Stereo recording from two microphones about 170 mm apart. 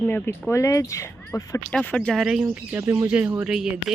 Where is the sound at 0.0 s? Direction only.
10° left (ahead or behind).